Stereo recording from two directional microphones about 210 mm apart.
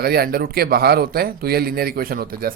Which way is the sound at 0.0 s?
45° right (ahead or behind).